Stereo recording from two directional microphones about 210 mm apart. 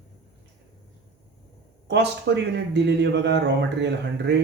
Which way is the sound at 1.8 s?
55° right (ahead or behind).